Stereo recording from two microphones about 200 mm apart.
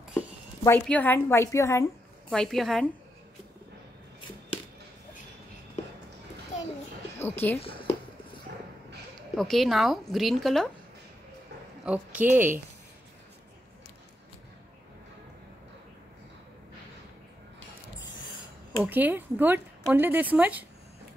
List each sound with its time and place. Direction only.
0.7 s a woman's voice: 5° left (ahead or behind)
2.3 s a woman's voice: centre (ahead or behind)
5.8 s music: 35° left (ahead or behind)
6.5 s a sound: 35° left (ahead or behind)
7.2 s a woman's voice: 10° left (ahead or behind)
9.3 s a woman's voice: centre (ahead or behind)
11.8 s speech: 5° right (ahead or behind)
18.8 s speech: 10° right (ahead or behind)